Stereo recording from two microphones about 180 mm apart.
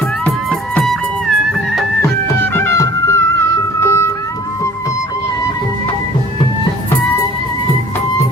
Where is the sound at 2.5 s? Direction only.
15° left (ahead or behind).